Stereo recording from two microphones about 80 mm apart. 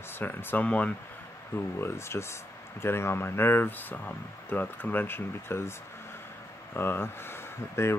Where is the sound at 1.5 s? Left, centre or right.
Left.